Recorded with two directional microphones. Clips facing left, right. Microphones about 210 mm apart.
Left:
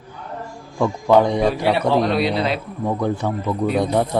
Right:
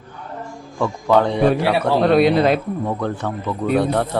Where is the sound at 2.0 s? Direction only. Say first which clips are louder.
Right 6 dB; 55° right (ahead or behind).